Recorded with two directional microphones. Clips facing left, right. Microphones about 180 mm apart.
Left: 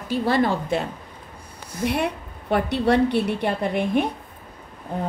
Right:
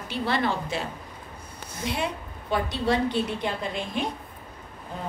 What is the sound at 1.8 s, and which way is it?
A woman's voice, 60° left (ahead or behind).